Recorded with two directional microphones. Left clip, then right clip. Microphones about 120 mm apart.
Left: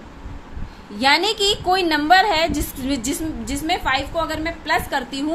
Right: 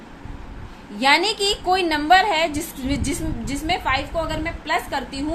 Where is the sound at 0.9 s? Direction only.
15° left (ahead or behind).